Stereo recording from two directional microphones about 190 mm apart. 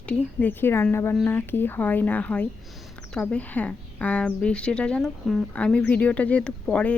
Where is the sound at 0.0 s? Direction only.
5° left (ahead or behind).